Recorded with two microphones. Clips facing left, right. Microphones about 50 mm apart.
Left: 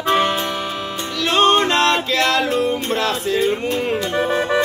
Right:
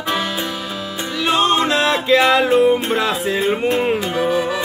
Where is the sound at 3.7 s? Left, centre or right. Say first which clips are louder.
Right 3 dB; right.